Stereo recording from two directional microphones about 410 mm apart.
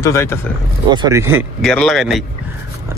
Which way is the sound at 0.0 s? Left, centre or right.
Centre.